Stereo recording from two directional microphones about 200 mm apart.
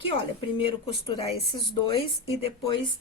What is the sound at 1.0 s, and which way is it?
Speech, 25° left (ahead or behind).